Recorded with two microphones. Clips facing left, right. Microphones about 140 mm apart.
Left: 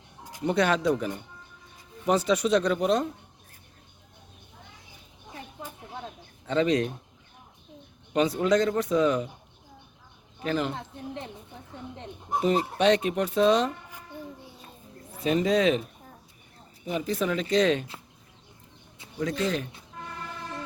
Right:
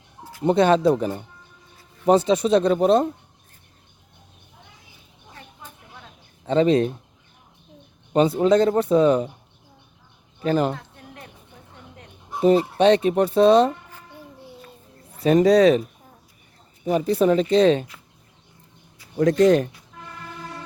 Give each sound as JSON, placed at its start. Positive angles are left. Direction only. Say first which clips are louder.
{"t": 0.4, "sound": "speech", "louder": "right 7 dB", "side_deg": -30}
{"t": 6.4, "sound": "speech", "louder": "right 6 dB", "side_deg": -35}
{"t": 8.1, "sound": "speech", "louder": "right 6 dB", "side_deg": -30}
{"t": 10.4, "sound": "speech", "louder": "right 7 dB", "side_deg": -40}
{"t": 10.8, "sound": "a sound", "louder": "left 5 dB", "side_deg": 25}
{"t": 12.4, "sound": "speech", "louder": "right 7 dB", "side_deg": -35}
{"t": 15.2, "sound": "speech", "louder": "right 8 dB", "side_deg": -40}
{"t": 16.8, "sound": "speech", "louder": "right 9 dB", "side_deg": -40}
{"t": 19.1, "sound": "speech", "louder": "right 11 dB", "side_deg": -60}
{"t": 19.4, "sound": "speech", "louder": "right 14 dB", "side_deg": -45}